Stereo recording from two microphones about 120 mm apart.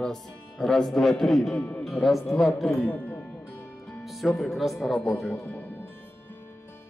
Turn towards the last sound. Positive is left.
turn(degrees=15)  # may be behind; listen again after turning